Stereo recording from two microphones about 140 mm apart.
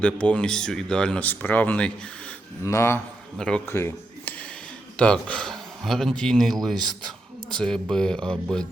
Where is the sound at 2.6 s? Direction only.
20° left (ahead or behind).